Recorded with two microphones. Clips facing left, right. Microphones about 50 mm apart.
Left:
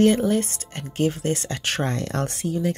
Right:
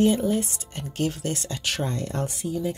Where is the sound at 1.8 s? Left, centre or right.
Left.